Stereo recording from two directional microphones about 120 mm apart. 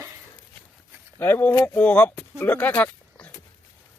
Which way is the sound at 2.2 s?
15° left (ahead or behind).